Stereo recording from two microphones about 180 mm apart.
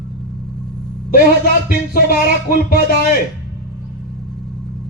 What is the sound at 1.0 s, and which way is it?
Speech, 55° left (ahead or behind).